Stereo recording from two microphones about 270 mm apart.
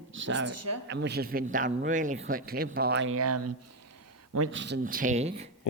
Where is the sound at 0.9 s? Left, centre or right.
Right.